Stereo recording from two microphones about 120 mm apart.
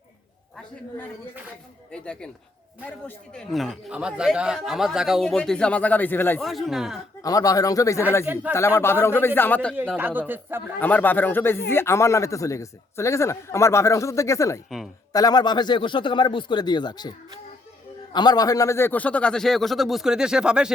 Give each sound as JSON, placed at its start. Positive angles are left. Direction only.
{"t": 1.9, "sound": "speech", "side_deg": 10}
{"t": 3.3, "sound": "a man's voice", "side_deg": 0}
{"t": 6.4, "sound": "a man's voice", "side_deg": 0}
{"t": 7.2, "sound": "speech", "side_deg": 30}
{"t": 10.0, "sound": "speech", "side_deg": -15}
{"t": 10.8, "sound": "a man's voice", "side_deg": 15}